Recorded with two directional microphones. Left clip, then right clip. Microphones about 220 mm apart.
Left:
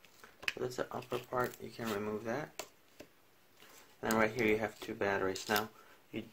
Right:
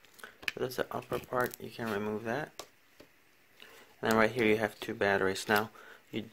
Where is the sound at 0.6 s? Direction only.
35° right (ahead or behind).